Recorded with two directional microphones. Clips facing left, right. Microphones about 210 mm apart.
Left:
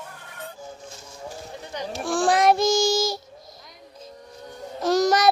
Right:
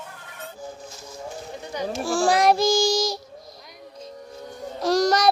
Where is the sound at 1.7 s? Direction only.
Centre (ahead or behind).